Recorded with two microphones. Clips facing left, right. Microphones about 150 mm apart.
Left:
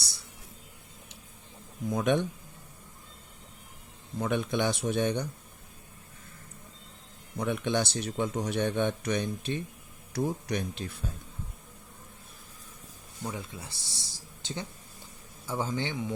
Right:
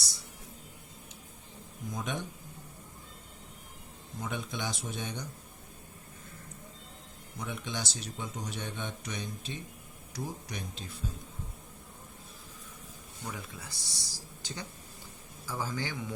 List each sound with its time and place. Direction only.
1.9 s speech: 70° left (ahead or behind)
4.2 s speech: 65° left (ahead or behind)
7.3 s speech: 60° left (ahead or behind)
13.2 s speech: 25° left (ahead or behind)